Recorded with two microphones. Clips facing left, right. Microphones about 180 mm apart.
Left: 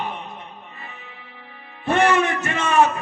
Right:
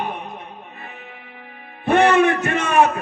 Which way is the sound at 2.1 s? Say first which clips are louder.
Right 5 dB; 60° right (ahead or behind).